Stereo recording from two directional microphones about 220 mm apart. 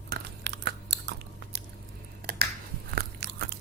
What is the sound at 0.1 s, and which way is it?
Chewing, 50° right (ahead or behind).